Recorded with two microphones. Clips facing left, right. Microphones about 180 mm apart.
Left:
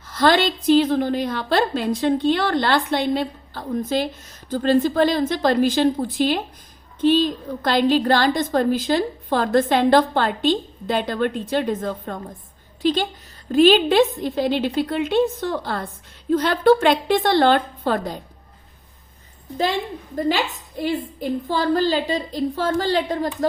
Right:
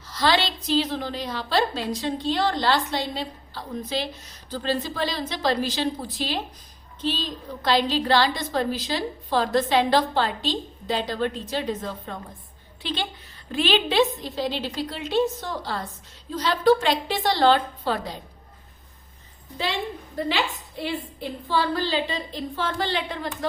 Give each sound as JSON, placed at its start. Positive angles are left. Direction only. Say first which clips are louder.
{"t": 0.0, "sound": "a woman's voice", "louder": "left 5 dB", "side_deg": 50}
{"t": 20.1, "sound": "a woman's voice", "louder": "left 5 dB", "side_deg": 45}